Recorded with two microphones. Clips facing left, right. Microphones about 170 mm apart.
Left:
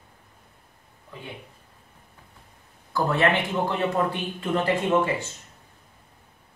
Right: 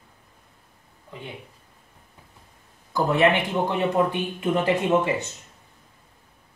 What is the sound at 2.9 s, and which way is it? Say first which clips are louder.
Speech: right 3 dB; 15° right (ahead or behind).